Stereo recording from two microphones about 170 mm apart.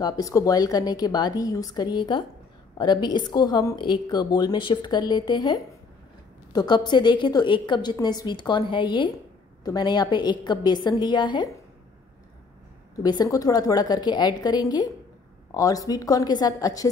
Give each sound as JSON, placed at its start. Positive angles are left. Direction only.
{"t": 0.0, "sound": "a woman's voice", "side_deg": 20}
{"t": 13.0, "sound": "a woman's voice", "side_deg": 25}